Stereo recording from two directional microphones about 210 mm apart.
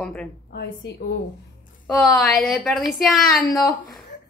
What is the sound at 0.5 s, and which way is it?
Speech, 50° left (ahead or behind).